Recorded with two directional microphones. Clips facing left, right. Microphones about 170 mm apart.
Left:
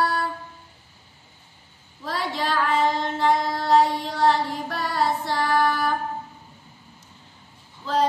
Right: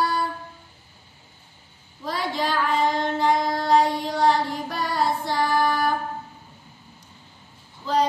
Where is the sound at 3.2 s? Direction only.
Centre (ahead or behind).